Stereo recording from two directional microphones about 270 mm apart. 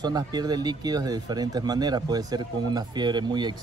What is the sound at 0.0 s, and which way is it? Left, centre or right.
Speech, centre.